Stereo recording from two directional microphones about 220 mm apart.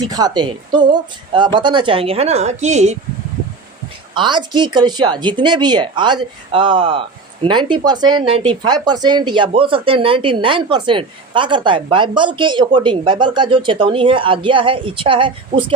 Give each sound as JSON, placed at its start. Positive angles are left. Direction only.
{"t": 0.1, "sound": "speech", "side_deg": -20}
{"t": 4.1, "sound": "speech", "side_deg": -20}